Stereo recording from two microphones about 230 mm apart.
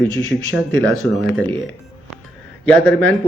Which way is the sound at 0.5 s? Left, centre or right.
Centre.